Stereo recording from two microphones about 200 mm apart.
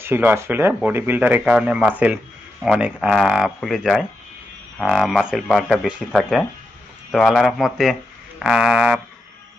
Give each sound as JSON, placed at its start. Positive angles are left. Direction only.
{"t": 0.0, "sound": "speech", "side_deg": -10}